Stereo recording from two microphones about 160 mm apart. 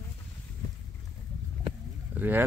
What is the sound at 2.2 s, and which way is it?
Speech, 10° right (ahead or behind).